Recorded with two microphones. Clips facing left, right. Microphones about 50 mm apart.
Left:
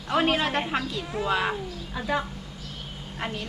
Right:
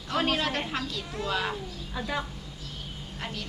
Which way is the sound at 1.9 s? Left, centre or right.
Centre.